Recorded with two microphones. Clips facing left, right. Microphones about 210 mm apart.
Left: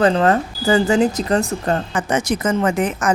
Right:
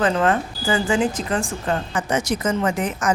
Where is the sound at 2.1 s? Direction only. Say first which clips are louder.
Left 3 dB; 55° left (ahead or behind).